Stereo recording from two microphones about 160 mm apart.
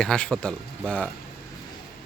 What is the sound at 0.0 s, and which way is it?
Speech, 5° left (ahead or behind).